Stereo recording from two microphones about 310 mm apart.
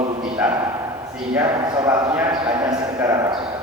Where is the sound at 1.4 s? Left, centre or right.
Centre.